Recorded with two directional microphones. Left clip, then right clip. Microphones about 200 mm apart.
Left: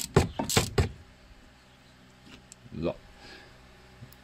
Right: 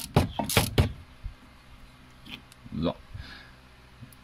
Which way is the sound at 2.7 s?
5° left (ahead or behind).